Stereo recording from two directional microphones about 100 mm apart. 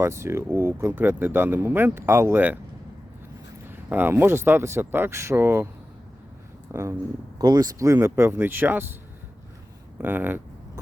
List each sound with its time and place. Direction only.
0.0 s speech: 25° right (ahead or behind)
3.7 s speech: 20° right (ahead or behind)
6.7 s speech: 30° right (ahead or behind)
7.3 s speech: 40° right (ahead or behind); by 9.0 s 20° right (ahead or behind)
10.0 s speech: 20° right (ahead or behind)